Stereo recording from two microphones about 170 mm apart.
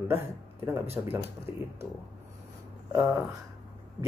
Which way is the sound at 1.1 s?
15° right (ahead or behind).